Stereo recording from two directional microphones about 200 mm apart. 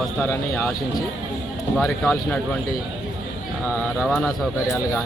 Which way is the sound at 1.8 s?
5° left (ahead or behind).